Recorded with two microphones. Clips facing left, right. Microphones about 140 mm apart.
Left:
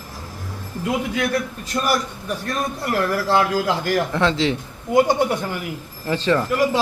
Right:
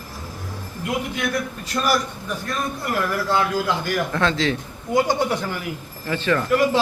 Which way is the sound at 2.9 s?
35° left (ahead or behind).